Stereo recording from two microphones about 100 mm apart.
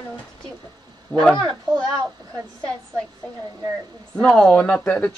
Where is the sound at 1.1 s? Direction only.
10° left (ahead or behind).